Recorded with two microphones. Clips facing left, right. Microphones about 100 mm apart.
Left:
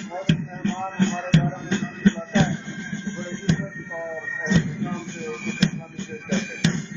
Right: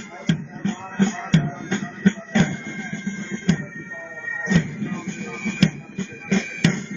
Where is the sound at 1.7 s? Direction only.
45° right (ahead or behind).